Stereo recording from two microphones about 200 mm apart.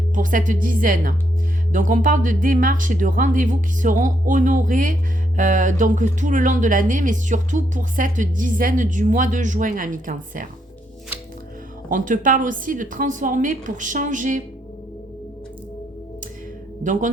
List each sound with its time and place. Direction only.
0.1 s a woman's voice: 40° right (ahead or behind)
11.9 s a woman's voice: 40° right (ahead or behind)
16.8 s a woman's voice: 40° right (ahead or behind)